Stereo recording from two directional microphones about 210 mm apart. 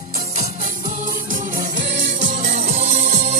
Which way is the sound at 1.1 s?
40° right (ahead or behind).